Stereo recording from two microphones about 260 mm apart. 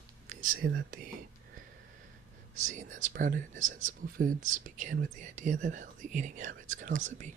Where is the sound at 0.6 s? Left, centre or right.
Right.